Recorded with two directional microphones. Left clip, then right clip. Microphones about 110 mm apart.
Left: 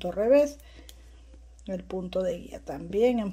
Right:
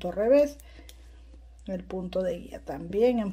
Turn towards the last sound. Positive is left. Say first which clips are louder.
# even
turn(degrees=10)  # may be behind; listen again after turning